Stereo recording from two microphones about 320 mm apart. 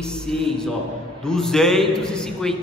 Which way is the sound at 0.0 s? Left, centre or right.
Centre.